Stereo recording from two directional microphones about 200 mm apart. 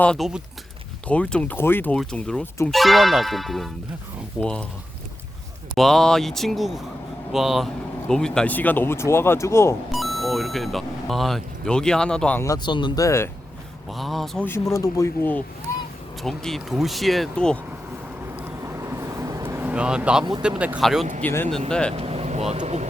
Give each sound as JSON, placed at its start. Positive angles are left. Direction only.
{"t": 0.0, "sound": "speech", "side_deg": 0}
{"t": 5.7, "sound": "speech", "side_deg": 0}
{"t": 9.9, "sound": "speech", "side_deg": 0}
{"t": 13.9, "sound": "speech", "side_deg": 0}
{"t": 18.3, "sound": "vehicle", "side_deg": -15}
{"t": 20.6, "sound": "speech", "side_deg": -5}
{"t": 21.9, "sound": "vehicle", "side_deg": -30}
{"t": 22.5, "sound": "speech", "side_deg": -30}